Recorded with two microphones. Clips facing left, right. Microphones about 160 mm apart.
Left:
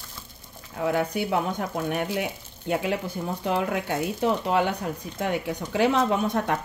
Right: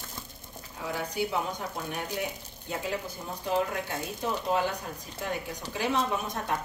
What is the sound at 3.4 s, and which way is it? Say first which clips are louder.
Speech: left 3 dB; 75° left (ahead or behind).